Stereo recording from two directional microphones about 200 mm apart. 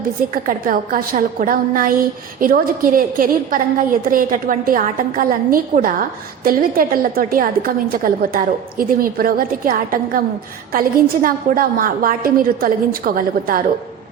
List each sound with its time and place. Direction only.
0.4 s a woman's voice: 45° right (ahead or behind)